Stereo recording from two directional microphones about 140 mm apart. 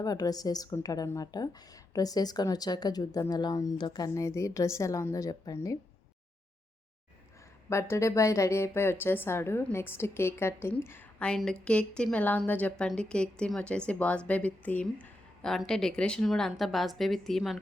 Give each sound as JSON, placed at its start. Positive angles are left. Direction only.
{"t": 0.0, "sound": "a woman's voice", "side_deg": 25}
{"t": 7.7, "sound": "a woman's voice", "side_deg": 20}